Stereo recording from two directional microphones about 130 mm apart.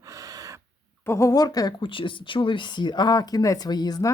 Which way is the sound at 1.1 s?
25° left (ahead or behind).